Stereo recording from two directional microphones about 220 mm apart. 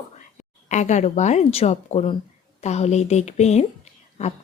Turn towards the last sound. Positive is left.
turn(degrees=30)  # may be behind; listen again after turning